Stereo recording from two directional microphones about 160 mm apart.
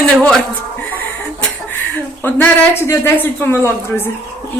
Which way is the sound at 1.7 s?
10° left (ahead or behind).